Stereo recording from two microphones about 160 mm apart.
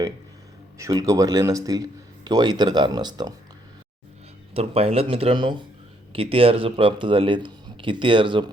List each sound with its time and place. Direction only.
0.8 s speech: 20° right (ahead or behind)
4.5 s speech: 40° right (ahead or behind)